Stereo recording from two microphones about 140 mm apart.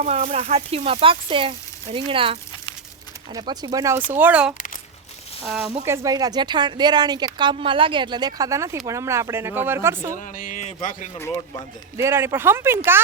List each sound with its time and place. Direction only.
0.0 s speech: 55° right (ahead or behind)
3.3 s speech: 30° right (ahead or behind)
4.1 s speech: 10° right (ahead or behind)
5.8 s speech: 20° right (ahead or behind)
10.2 s speech: 70° left (ahead or behind)
11.9 s speech: 20° right (ahead or behind)